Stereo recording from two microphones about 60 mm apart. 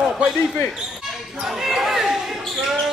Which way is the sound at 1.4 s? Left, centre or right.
Centre.